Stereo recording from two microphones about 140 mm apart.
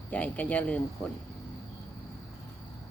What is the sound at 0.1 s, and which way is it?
Speech, 10° left (ahead or behind).